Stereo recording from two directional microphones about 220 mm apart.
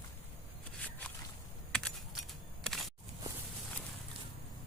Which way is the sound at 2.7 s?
5° left (ahead or behind).